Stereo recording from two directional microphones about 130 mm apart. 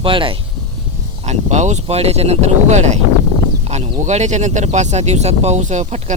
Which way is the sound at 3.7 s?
55° right (ahead or behind).